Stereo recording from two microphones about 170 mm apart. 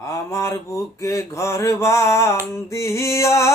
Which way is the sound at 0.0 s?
20° left (ahead or behind).